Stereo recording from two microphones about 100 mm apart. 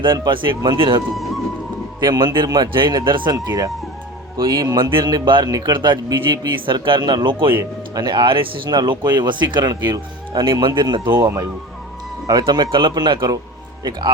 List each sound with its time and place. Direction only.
0.0 s speech: 55° right (ahead or behind)
2.0 s speech: 45° right (ahead or behind)
3.3 s speech: 35° right (ahead or behind)
5.5 s speech: 35° right (ahead or behind)
5.7 s speech: 50° right (ahead or behind)
12.3 s speech: 45° right (ahead or behind)